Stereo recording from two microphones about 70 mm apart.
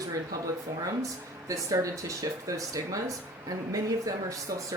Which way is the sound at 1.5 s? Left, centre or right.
Right.